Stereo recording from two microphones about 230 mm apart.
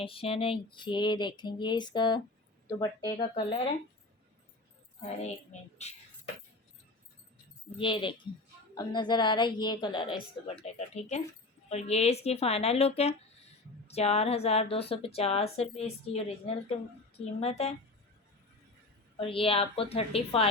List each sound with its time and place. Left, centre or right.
0.0 s speech: left
5.0 s speech: left
7.8 s speech: left
17.4 s speech: left
19.2 s speech: left